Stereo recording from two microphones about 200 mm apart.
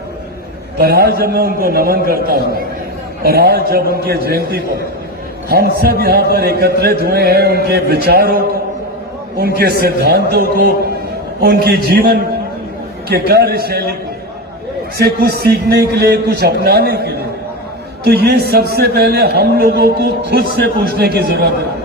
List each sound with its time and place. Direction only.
0.8 s a man's voice: 50° right (ahead or behind)
9.4 s a man's voice: 50° right (ahead or behind)
14.9 s a man's voice: 50° right (ahead or behind)